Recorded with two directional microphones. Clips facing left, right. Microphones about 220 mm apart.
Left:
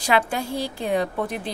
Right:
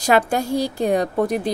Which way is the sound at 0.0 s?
45° right (ahead or behind).